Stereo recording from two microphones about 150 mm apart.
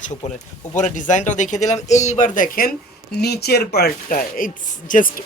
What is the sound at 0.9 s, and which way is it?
Speech, 55° left (ahead or behind).